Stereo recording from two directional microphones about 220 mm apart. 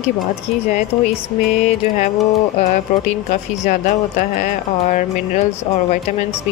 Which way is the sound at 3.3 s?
35° left (ahead or behind).